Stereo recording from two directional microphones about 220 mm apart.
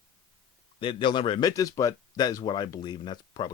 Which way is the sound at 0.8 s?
20° left (ahead or behind).